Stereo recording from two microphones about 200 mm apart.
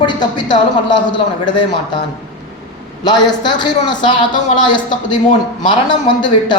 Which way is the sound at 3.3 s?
20° left (ahead or behind).